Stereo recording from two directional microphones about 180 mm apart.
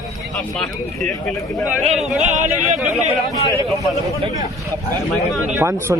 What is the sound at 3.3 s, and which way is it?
Speech, 15° right (ahead or behind).